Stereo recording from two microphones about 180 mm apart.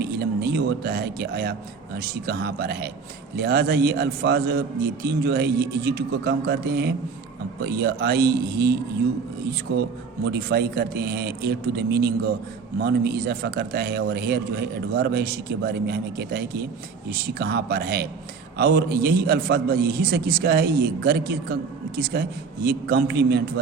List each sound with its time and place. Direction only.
0.0 s a man's voice: 60° right (ahead or behind)
10.3 s a man's voice: 65° right (ahead or behind)